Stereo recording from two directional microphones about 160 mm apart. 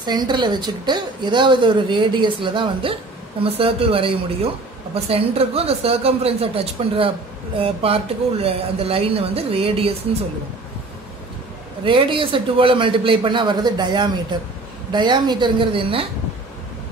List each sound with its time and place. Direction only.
0.0 s a woman's voice: 25° right (ahead or behind)
11.8 s a woman's voice: 30° right (ahead or behind)